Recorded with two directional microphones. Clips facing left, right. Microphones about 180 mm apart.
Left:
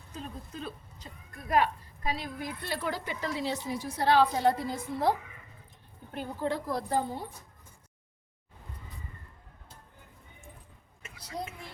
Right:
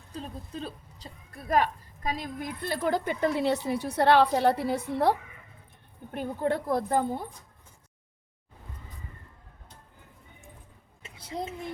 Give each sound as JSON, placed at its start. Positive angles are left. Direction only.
{"t": 0.1, "sound": "a woman's voice", "side_deg": -30}
{"t": 6.1, "sound": "a woman's voice", "side_deg": -55}
{"t": 11.1, "sound": "a woman's voice", "side_deg": -25}